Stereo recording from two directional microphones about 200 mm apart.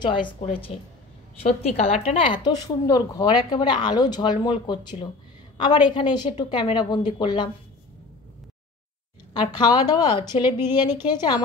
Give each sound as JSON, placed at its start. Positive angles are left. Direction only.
{"t": 0.0, "sound": "a woman's voice", "side_deg": 25}
{"t": 9.3, "sound": "a woman's voice", "side_deg": 20}